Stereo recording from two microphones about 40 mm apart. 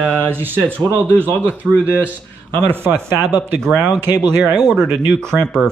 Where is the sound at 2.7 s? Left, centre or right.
Right.